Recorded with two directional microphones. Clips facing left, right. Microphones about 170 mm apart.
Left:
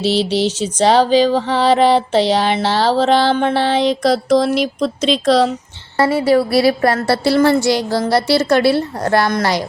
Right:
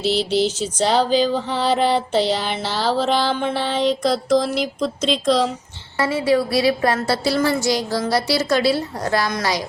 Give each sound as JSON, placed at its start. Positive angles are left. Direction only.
{"t": 0.0, "sound": "music", "side_deg": 80}
{"t": 6.1, "sound": "a woman's voice", "side_deg": 60}